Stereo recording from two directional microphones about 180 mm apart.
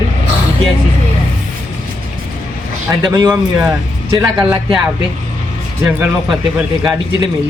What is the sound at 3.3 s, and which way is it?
A man's voice, 5° right (ahead or behind).